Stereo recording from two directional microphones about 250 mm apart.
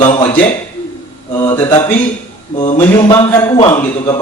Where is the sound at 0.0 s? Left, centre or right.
Centre.